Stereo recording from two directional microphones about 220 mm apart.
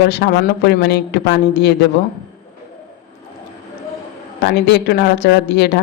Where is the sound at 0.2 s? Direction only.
50° left (ahead or behind).